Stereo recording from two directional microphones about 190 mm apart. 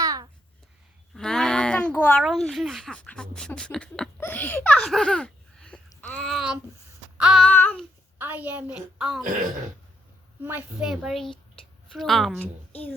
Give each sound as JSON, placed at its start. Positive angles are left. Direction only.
{"t": 0.0, "sound": "babbling", "side_deg": -20}
{"t": 1.1, "sound": "a woman's voice", "side_deg": 5}
{"t": 7.4, "sound": "child singing", "side_deg": 10}
{"t": 8.2, "sound": "a woman's voice", "side_deg": -10}
{"t": 10.4, "sound": "a woman's voice", "side_deg": -10}